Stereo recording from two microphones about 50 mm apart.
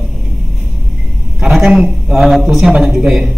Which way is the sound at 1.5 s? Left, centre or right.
Centre.